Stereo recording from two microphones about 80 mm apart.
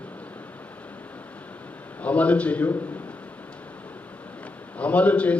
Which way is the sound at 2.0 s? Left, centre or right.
Centre.